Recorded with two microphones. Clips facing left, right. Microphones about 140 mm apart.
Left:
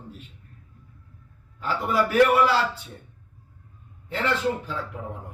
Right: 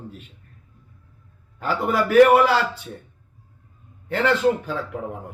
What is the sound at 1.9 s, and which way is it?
Speech, 65° right (ahead or behind).